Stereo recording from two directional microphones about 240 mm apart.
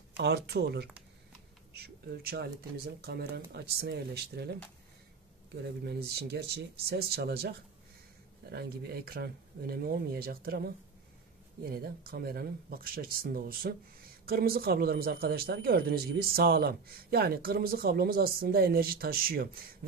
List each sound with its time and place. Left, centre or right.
0.2 s speech: right
5.9 s speech: right